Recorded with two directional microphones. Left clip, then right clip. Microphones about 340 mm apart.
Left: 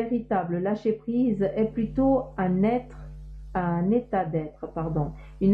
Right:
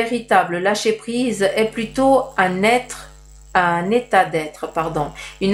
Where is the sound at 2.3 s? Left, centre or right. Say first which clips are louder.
Right 10 dB; centre.